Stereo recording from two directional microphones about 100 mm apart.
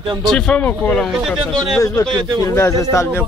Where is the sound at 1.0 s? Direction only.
Centre (ahead or behind).